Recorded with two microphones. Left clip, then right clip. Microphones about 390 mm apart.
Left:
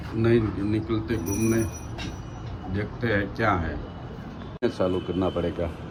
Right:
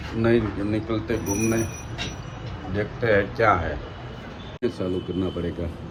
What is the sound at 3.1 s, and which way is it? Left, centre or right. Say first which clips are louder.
Speech: right 5 dB; centre.